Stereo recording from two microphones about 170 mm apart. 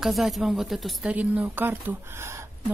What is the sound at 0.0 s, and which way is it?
Speech, centre (ahead or behind).